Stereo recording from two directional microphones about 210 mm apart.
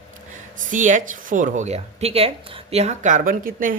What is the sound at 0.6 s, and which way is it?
Speech, 40° right (ahead or behind).